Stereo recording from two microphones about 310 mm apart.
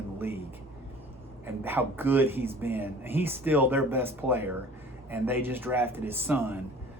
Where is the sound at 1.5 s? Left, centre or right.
Centre.